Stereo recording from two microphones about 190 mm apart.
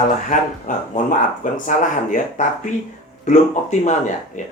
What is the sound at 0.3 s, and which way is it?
Speech, 40° left (ahead or behind).